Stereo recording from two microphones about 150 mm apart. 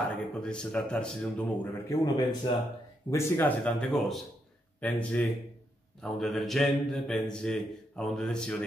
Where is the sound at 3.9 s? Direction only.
Centre (ahead or behind).